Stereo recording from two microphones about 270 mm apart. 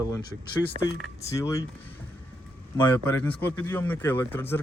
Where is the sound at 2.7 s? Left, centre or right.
Centre.